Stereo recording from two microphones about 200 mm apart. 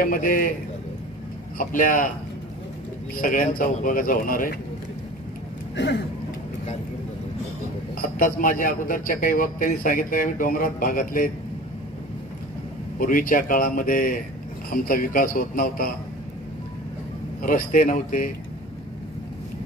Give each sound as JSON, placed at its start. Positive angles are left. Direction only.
{"t": 0.0, "sound": "a man's voice", "side_deg": 45}
{"t": 1.6, "sound": "a man's voice", "side_deg": 40}
{"t": 3.2, "sound": "a man's voice", "side_deg": 45}
{"t": 7.9, "sound": "a man's voice", "side_deg": 45}
{"t": 13.0, "sound": "a man's voice", "side_deg": 45}
{"t": 17.4, "sound": "a man's voice", "side_deg": 45}